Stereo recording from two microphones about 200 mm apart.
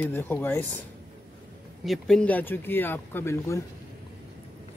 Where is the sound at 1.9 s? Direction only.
5° left (ahead or behind).